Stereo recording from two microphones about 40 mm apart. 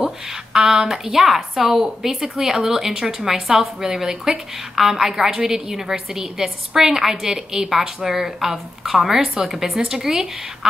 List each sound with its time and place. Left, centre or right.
0.0 s speech: right
1.1 s a woman's voice: centre